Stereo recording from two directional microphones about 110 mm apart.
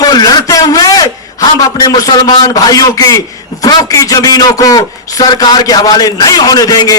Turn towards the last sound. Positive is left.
turn(degrees=35)  # may be behind; listen again after turning